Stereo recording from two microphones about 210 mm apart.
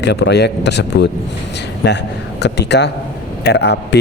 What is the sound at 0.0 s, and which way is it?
A man's voice, 55° left (ahead or behind).